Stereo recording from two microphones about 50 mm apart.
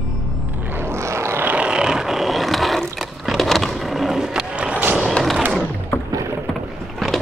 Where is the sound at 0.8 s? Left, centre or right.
Right.